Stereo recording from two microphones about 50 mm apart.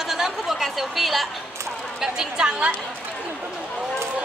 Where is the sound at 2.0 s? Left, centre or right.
Centre.